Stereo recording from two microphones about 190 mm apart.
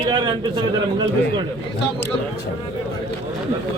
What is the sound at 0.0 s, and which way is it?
A man's voice, 25° right (ahead or behind).